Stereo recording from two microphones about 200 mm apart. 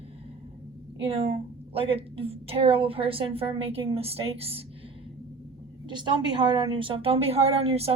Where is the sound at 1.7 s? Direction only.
30° right (ahead or behind).